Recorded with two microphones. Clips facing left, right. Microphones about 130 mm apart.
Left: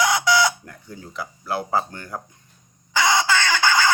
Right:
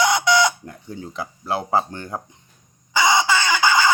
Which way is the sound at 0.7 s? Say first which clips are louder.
Right 5 dB; 25° right (ahead or behind).